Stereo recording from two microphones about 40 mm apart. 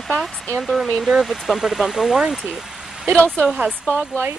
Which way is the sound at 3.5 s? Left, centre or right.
Right.